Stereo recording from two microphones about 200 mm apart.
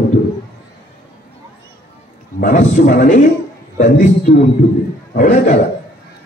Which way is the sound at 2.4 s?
40° left (ahead or behind).